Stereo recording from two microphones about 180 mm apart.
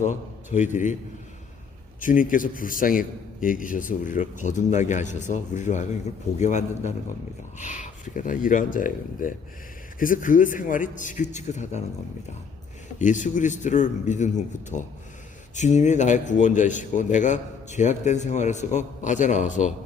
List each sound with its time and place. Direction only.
0.0 s a man's voice: 45° left (ahead or behind)
2.0 s a man's voice: 50° left (ahead or behind)
13.0 s a man's voice: 45° left (ahead or behind)